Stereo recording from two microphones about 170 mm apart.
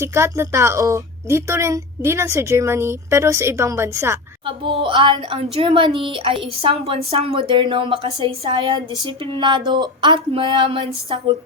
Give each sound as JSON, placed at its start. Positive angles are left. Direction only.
{"t": 0.0, "sound": "a woman's voice", "side_deg": -15}
{"t": 4.4, "sound": "a woman's voice", "side_deg": -30}